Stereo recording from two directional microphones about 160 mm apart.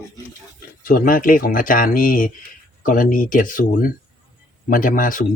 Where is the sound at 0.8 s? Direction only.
60° left (ahead or behind).